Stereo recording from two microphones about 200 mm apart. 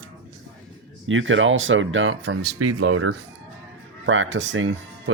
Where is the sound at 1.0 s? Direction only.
75° right (ahead or behind); by 3.2 s 90° right.